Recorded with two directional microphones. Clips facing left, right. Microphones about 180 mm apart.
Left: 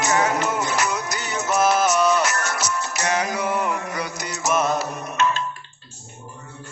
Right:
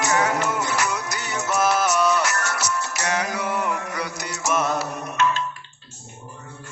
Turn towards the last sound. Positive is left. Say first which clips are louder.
# even
turn(degrees=20)  # may be behind; listen again after turning